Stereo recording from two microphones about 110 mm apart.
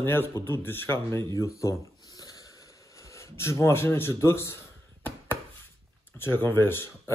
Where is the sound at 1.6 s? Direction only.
30° left (ahead or behind).